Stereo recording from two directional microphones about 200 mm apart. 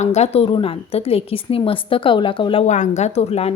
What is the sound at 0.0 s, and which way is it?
A woman's voice, 35° left (ahead or behind).